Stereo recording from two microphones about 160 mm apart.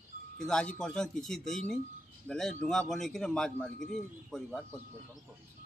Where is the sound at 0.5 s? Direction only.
5° left (ahead or behind).